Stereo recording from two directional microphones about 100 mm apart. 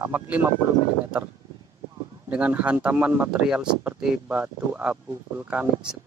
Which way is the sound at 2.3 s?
10° right (ahead or behind).